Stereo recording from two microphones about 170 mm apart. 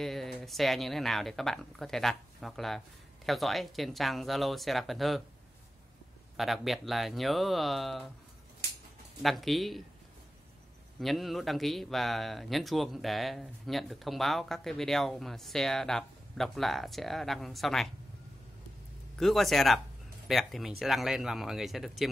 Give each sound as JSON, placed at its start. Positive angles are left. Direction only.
{"t": 0.0, "sound": "speech", "side_deg": 0}
{"t": 6.3, "sound": "speech", "side_deg": 0}
{"t": 9.2, "sound": "speech", "side_deg": 0}
{"t": 11.0, "sound": "speech", "side_deg": 0}
{"t": 19.1, "sound": "speech", "side_deg": 0}